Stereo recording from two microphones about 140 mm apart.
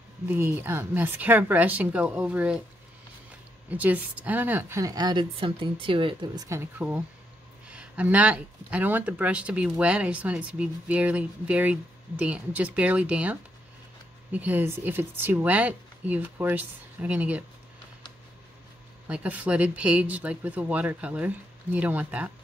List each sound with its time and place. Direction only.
0.3 s speech: 15° right (ahead or behind)
3.7 s speech: 10° right (ahead or behind)
19.0 s speech: 10° right (ahead or behind)